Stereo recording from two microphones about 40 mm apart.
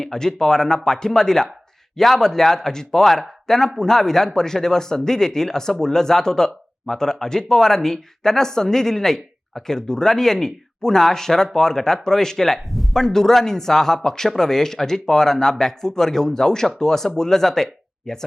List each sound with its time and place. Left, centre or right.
0.0 s speech: centre